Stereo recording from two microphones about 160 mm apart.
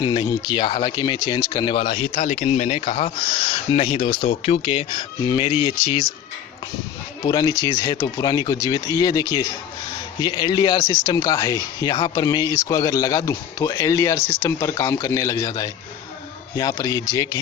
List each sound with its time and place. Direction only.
0.0 s speech: 30° left (ahead or behind); by 2.8 s 45° left (ahead or behind)
2.9 s speech: 35° left (ahead or behind)
7.3 s speech: 25° left (ahead or behind)